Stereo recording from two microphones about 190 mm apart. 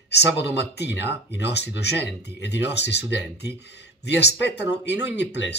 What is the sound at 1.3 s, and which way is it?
Speech, 65° left (ahead or behind).